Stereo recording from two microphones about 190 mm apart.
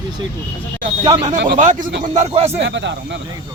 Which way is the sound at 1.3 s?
45° right (ahead or behind).